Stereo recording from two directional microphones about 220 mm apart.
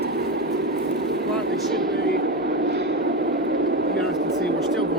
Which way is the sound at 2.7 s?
50° right (ahead or behind).